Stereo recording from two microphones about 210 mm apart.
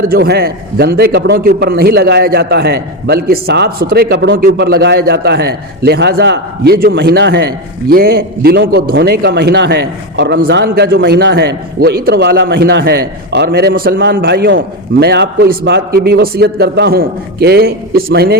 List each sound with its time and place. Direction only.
0.1 s a man's voice: 50° right (ahead or behind)